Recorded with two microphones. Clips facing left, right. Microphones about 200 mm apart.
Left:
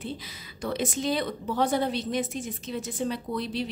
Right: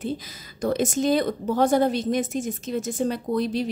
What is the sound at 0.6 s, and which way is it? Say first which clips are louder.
A woman's voice: right 6 dB; 45° right (ahead or behind).